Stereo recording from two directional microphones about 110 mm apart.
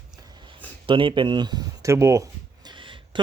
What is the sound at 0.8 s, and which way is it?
Speech, 50° right (ahead or behind).